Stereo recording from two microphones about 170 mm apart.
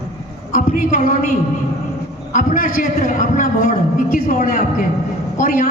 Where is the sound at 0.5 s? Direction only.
50° left (ahead or behind).